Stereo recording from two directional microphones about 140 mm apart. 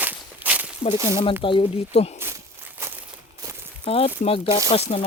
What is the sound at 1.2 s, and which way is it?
Speech, 40° left (ahead or behind).